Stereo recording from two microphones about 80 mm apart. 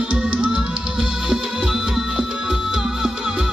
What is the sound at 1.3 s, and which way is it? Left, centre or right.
Music, centre.